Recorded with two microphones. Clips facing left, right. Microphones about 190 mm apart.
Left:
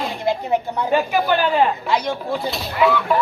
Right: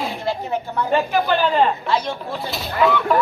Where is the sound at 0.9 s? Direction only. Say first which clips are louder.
Left 1 dB; 5° left (ahead or behind).